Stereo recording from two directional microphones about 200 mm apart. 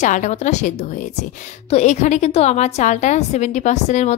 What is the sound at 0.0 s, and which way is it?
A woman's voice, 35° left (ahead or behind).